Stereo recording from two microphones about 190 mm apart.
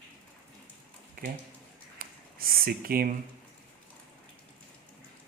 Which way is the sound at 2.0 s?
50° right (ahead or behind).